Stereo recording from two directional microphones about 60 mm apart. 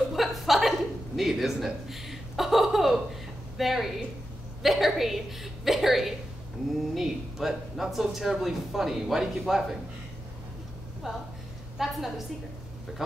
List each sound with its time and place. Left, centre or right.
0.1 s a sound: centre
3.5 s speech: centre
11.0 s a woman's voice: centre